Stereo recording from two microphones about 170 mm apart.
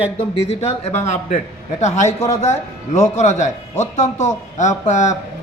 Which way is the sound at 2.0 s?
15° left (ahead or behind).